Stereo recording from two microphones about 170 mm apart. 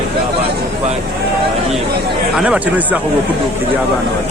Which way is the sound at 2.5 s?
10° right (ahead or behind).